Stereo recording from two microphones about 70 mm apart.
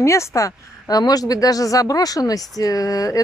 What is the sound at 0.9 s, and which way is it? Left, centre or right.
Speech, left.